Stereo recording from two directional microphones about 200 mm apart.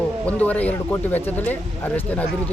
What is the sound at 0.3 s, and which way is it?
Speech, 5° left (ahead or behind).